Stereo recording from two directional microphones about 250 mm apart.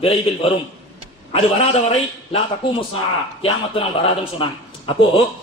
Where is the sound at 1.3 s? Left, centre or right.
Left.